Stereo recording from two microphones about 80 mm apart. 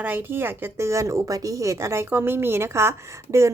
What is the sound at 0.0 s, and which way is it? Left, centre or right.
A woman's voice, right.